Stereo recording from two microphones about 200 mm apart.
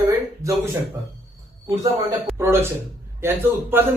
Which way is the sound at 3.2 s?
10° right (ahead or behind).